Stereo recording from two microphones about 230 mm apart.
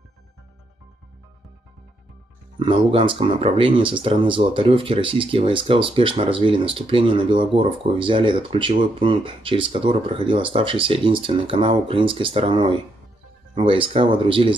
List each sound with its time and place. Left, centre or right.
2.6 s speech: right